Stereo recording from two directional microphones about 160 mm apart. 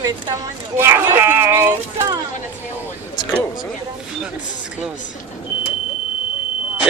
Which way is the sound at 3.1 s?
25° left (ahead or behind).